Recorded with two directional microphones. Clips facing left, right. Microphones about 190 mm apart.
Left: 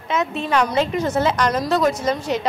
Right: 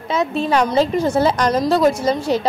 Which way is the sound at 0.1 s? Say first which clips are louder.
Right 3 dB; 35° right (ahead or behind).